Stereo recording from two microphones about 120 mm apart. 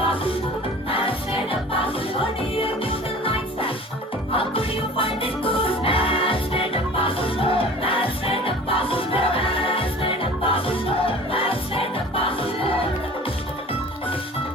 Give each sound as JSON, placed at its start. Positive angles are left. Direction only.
{"t": 0.9, "sound": "music", "side_deg": 50}